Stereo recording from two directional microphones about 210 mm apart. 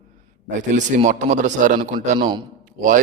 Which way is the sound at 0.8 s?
35° right (ahead or behind).